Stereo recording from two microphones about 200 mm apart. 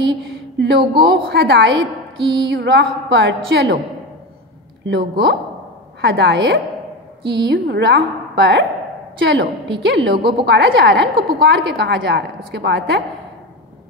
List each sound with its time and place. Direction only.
0.6 s a woman's voice: 60° right (ahead or behind)
4.8 s a woman's voice: 60° right (ahead or behind)